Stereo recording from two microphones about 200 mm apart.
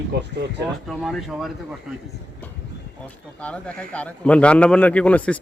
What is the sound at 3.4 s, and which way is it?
A man's voice, 5° left (ahead or behind).